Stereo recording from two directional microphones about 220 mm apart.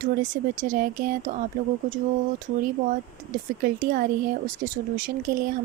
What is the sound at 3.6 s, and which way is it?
Speech, 40° right (ahead or behind).